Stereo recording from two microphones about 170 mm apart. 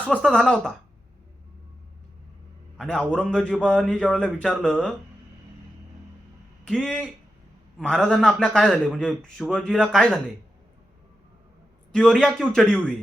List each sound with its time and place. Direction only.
0.1 s a man's voice: 5° left (ahead or behind)
2.7 s a man's voice: 5° left (ahead or behind)
6.7 s a man's voice: 5° left (ahead or behind)
11.9 s a man's voice: 5° left (ahead or behind)